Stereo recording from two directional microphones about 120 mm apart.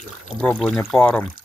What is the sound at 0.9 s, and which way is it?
Speech, 10° left (ahead or behind).